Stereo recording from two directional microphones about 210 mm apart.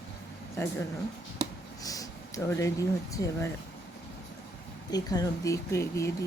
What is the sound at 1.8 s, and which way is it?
Speech, 15° left (ahead or behind).